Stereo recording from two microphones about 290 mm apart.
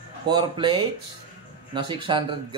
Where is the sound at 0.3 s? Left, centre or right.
Centre.